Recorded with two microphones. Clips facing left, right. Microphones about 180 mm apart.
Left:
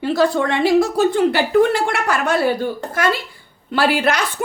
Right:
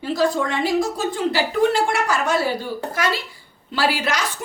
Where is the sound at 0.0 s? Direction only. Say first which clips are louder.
Left 4 dB; 65° left (ahead or behind).